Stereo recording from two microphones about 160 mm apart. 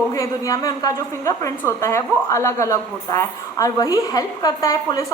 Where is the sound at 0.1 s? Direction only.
20° left (ahead or behind).